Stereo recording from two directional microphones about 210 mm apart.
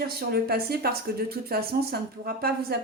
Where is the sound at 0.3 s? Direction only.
45° right (ahead or behind).